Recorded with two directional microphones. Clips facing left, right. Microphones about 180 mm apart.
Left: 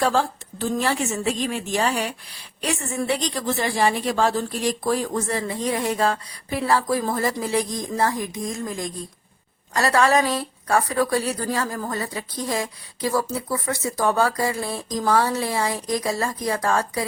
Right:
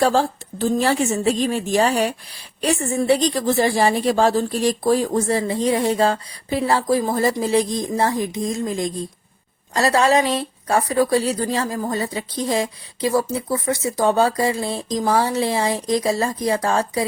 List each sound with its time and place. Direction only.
0.0 s speech: 30° right (ahead or behind)